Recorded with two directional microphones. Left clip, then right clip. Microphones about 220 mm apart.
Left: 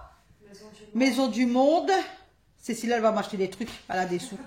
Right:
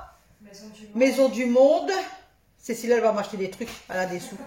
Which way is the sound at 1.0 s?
45° left (ahead or behind).